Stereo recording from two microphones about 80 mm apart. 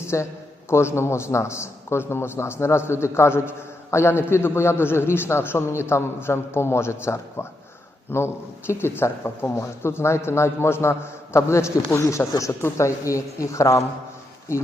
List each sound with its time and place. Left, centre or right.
0.1 s a man's voice: left